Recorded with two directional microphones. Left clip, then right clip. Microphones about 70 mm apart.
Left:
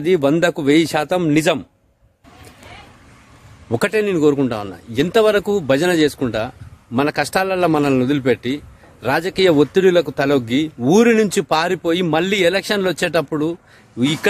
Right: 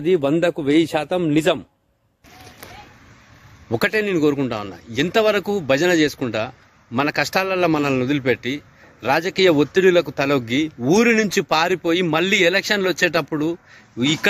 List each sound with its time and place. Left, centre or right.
0.0 s speech: left
1.3 s a man's voice: left
3.7 s a man's voice: left
4.1 s speech: left
11.4 s speech: left